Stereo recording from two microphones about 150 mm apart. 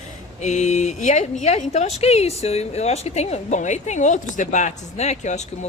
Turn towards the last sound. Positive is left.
turn(degrees=50)  # may be behind; listen again after turning